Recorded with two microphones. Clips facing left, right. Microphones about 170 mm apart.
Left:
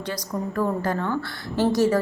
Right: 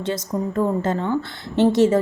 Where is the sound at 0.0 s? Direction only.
25° right (ahead or behind).